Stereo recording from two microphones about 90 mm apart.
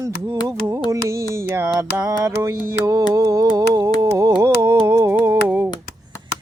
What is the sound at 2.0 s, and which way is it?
Music, 35° right (ahead or behind).